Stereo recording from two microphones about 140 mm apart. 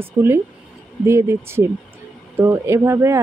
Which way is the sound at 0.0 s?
15° right (ahead or behind).